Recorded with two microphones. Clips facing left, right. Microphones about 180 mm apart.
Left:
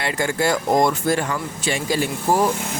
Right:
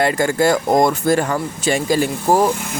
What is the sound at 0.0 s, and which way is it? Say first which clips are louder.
Speech: right 6 dB; 45° right (ahead or behind).